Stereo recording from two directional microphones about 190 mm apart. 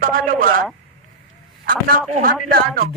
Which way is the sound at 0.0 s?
50° right (ahead or behind).